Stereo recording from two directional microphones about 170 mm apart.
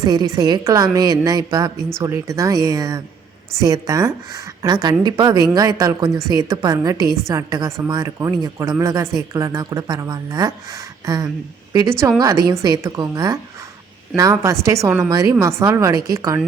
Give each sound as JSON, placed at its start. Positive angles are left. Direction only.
{"t": 0.0, "sound": "a woman's voice", "side_deg": -20}